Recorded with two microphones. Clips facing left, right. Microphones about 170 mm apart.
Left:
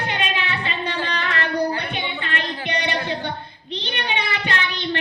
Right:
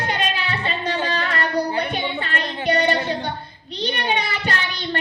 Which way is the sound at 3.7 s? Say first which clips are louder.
Right 4 dB; 40° right (ahead or behind).